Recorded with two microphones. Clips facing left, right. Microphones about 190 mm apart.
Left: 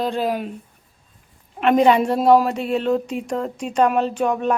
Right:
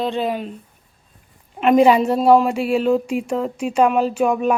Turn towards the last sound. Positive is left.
turn(degrees=-10)  # may be behind; listen again after turning